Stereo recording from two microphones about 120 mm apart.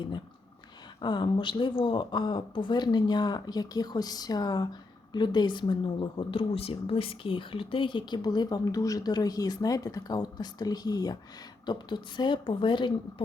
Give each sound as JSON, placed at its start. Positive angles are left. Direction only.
{"t": 1.0, "sound": "speech", "side_deg": 40}